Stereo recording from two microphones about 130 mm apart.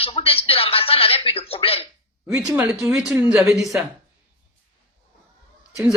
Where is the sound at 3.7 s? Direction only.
10° right (ahead or behind).